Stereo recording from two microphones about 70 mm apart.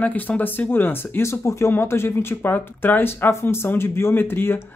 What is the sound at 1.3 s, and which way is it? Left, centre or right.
Speech, left.